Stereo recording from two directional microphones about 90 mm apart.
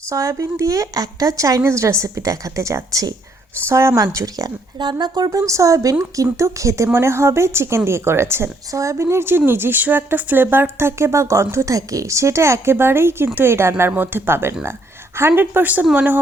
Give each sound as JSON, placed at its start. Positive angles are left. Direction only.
{"t": 0.1, "sound": "a woman's voice", "side_deg": -35}
{"t": 4.8, "sound": "a woman's voice", "side_deg": -55}